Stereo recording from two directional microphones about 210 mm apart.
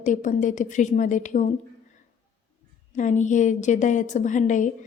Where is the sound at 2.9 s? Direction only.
35° left (ahead or behind).